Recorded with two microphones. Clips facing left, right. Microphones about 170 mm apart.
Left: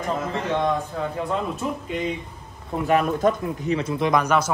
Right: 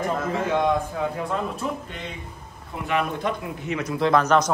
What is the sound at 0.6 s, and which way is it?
Speech, 5° right (ahead or behind).